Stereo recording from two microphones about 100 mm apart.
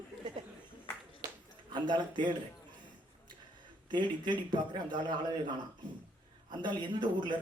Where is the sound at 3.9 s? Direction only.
50° right (ahead or behind).